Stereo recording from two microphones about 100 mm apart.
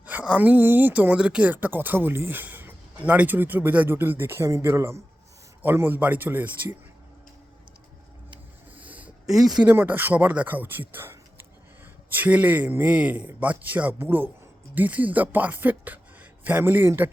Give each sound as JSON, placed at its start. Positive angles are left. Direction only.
{"t": 0.0, "sound": "speech", "side_deg": -15}
{"t": 8.7, "sound": "a sound", "side_deg": -15}
{"t": 9.2, "sound": "speech", "side_deg": -5}
{"t": 9.6, "sound": "a man's voice", "side_deg": -20}